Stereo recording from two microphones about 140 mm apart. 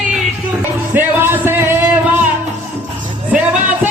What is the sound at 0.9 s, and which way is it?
Music, 15° right (ahead or behind).